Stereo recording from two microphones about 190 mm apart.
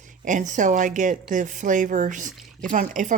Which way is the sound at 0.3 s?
40° right (ahead or behind).